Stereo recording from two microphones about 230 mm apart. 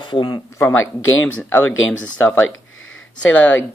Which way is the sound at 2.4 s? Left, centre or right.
Left.